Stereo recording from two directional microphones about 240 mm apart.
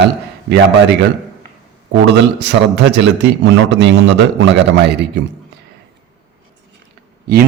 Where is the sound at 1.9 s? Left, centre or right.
Right.